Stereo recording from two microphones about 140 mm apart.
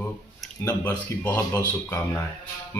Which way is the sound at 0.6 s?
15° left (ahead or behind).